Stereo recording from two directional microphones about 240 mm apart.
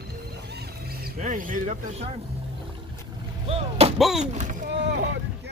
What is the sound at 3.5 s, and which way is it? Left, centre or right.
Artillery fire, right.